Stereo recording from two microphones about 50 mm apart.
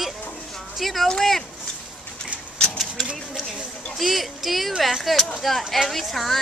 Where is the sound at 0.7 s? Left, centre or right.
Centre.